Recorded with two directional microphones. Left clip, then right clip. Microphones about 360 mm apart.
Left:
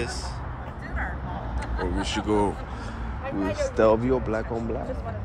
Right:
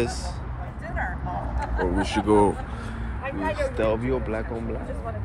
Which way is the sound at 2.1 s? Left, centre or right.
Centre.